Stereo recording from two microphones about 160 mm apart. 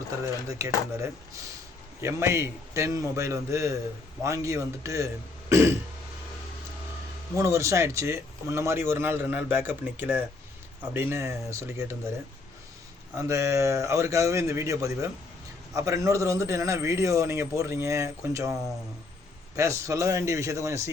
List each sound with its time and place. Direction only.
0.4 s a man's voice: 20° right (ahead or behind)
5.5 s throat clearing: 15° right (ahead or behind)
7.3 s speech: 20° right (ahead or behind)
13.1 s a man's voice: 20° right (ahead or behind)
19.5 s a man's voice: 20° right (ahead or behind)